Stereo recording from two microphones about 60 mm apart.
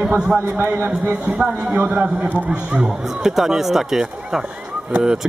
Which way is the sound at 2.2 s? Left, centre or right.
Right.